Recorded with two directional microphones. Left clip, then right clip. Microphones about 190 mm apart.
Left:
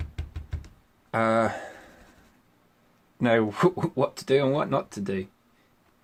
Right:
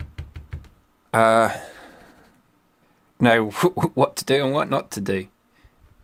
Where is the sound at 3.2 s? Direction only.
45° right (ahead or behind).